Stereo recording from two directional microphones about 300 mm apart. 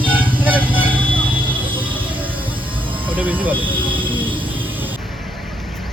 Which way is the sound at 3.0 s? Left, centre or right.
Centre.